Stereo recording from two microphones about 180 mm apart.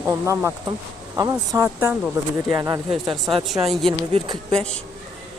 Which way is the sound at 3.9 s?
25° right (ahead or behind).